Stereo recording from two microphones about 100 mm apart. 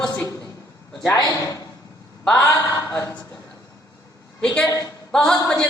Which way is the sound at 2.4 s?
35° left (ahead or behind).